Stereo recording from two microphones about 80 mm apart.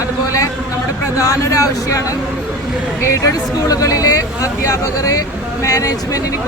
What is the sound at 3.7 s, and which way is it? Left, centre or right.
Speech, left.